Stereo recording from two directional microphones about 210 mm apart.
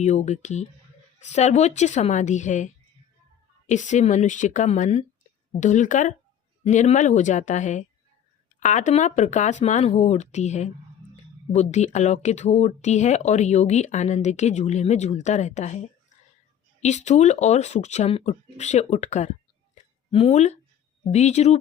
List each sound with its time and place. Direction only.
0.0 s speech: 35° left (ahead or behind)
16.8 s speech: 35° left (ahead or behind)